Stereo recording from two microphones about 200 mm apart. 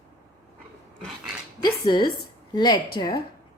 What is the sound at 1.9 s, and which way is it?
A woman's voice, 20° left (ahead or behind).